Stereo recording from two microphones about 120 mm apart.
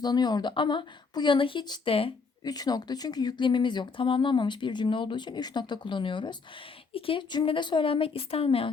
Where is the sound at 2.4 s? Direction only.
35° left (ahead or behind).